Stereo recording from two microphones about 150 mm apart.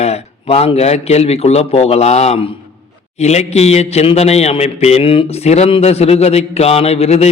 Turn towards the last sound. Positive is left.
turn(degrees=45)  # may be behind; listen again after turning